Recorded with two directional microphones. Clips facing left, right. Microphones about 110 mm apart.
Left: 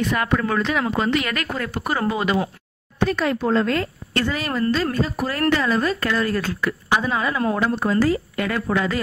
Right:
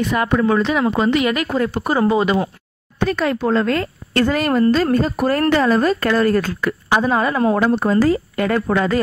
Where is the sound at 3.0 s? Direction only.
55° right (ahead or behind).